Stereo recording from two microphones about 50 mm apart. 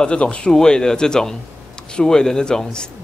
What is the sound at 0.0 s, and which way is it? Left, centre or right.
A man's voice, left.